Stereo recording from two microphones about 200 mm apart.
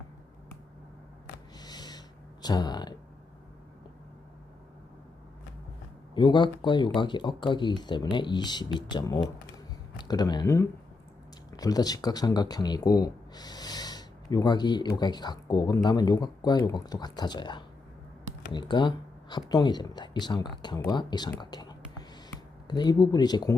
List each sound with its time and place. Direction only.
1.5 s snort: 20° left (ahead or behind)
6.1 s speech: 25° left (ahead or behind)